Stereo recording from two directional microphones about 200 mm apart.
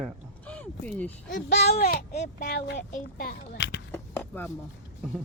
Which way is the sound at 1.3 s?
60° left (ahead or behind).